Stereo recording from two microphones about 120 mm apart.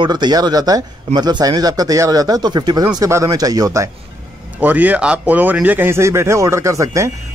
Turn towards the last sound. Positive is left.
turn(degrees=-25)  # may be behind; listen again after turning